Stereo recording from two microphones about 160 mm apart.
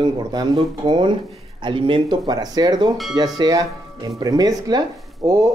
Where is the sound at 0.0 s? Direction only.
30° right (ahead or behind).